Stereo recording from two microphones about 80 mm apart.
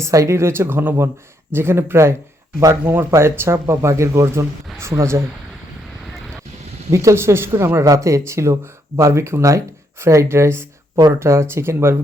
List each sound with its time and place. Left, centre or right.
0.0 s speech: right
6.9 s speech: right